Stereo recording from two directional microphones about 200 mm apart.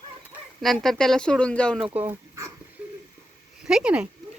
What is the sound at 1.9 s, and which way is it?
Speech, 10° right (ahead or behind).